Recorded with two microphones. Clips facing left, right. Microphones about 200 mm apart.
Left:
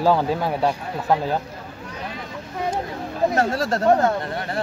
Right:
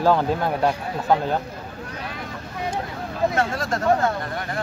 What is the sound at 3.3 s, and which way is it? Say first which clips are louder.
Speech: left 3 dB; 35° left (ahead or behind).